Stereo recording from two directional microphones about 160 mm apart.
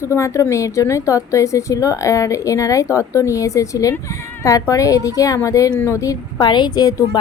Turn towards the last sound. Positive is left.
turn(degrees=25)  # may be behind; listen again after turning